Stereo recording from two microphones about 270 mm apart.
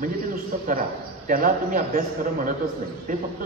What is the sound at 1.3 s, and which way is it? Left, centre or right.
A man's voice, right.